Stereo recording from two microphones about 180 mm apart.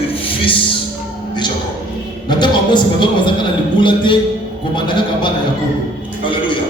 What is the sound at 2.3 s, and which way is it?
A man's voice, 25° left (ahead or behind).